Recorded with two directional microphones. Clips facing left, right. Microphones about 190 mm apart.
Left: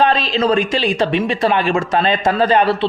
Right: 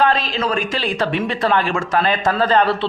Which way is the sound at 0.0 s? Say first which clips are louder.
Left 3 dB; 20° left (ahead or behind).